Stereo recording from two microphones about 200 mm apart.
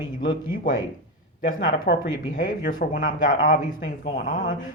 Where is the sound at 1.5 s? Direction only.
45° left (ahead or behind).